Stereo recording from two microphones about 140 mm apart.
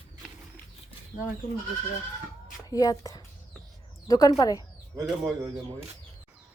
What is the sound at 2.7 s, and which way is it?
Speech, 25° left (ahead or behind).